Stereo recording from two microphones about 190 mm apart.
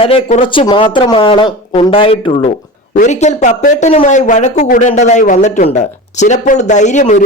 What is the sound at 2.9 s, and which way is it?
Speech, 40° left (ahead or behind).